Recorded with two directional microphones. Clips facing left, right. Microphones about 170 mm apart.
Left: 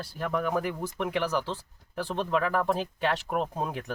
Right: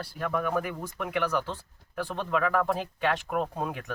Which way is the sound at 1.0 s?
30° left (ahead or behind).